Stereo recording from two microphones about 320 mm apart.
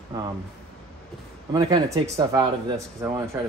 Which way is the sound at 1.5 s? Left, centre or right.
Centre.